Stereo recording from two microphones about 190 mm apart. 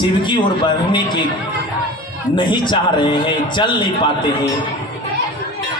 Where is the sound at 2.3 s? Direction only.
25° left (ahead or behind).